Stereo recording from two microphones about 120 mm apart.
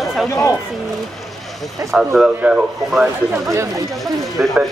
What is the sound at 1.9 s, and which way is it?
Speech, 5° right (ahead or behind).